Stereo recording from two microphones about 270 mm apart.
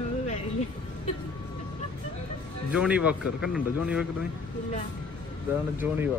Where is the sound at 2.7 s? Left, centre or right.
Centre.